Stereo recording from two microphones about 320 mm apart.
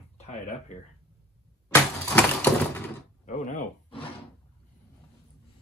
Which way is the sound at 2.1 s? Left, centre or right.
Centre.